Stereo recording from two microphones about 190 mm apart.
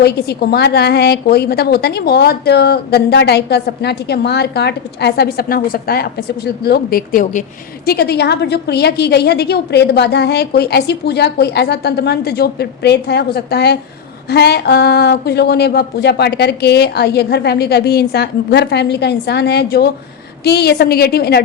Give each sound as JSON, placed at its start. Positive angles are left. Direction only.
{"t": 0.0, "sound": "a woman's voice", "side_deg": 60}
{"t": 7.9, "sound": "a woman's voice", "side_deg": 55}